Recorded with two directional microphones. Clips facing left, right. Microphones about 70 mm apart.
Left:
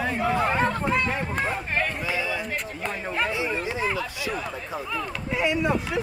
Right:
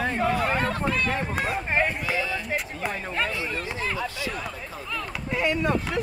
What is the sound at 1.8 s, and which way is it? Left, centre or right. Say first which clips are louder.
Speech: right 3 dB; centre.